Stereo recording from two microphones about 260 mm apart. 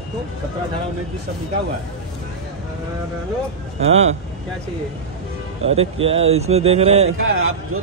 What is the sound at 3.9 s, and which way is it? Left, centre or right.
Speech, right.